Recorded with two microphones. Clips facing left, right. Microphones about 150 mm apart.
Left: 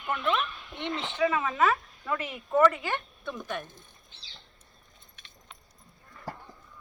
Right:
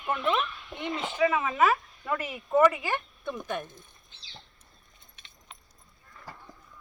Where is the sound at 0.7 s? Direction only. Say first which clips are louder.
Right 1 dB; 5° right (ahead or behind).